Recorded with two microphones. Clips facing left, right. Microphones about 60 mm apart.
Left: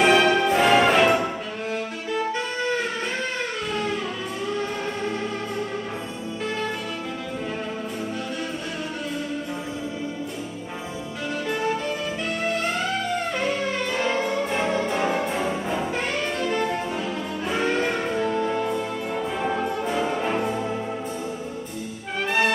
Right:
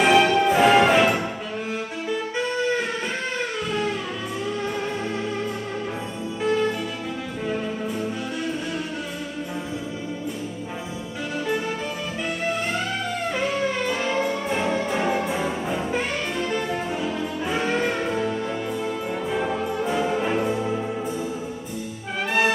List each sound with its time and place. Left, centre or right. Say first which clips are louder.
0.0 s music: right 1 dB; centre
13.3 s music: right 1 dB; centre